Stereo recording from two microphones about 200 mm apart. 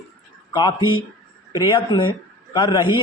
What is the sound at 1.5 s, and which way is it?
Speech, 25° left (ahead or behind).